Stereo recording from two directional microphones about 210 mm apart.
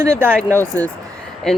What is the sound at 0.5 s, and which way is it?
Speech, 10° left (ahead or behind).